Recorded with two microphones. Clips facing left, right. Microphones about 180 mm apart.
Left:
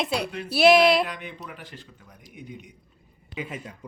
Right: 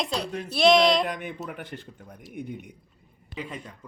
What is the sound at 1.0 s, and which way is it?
A man's voice, 50° right (ahead or behind).